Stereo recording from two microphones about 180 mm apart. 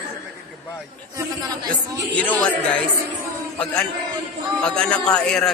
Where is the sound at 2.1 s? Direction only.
10° left (ahead or behind).